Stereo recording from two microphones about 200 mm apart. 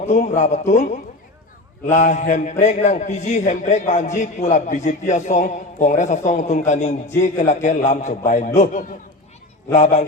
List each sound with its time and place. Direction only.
0.0 s a man's voice: 35° left (ahead or behind)